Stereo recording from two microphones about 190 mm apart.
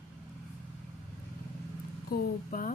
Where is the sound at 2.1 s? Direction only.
50° left (ahead or behind).